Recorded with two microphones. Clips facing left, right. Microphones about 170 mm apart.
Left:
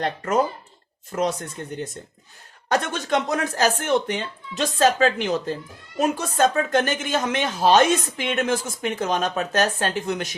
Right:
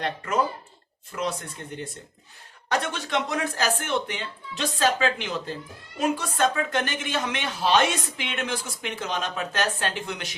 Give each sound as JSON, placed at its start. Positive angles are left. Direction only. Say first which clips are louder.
{"t": 0.0, "sound": "a woman's voice", "louder": "left 4 dB", "side_deg": 40}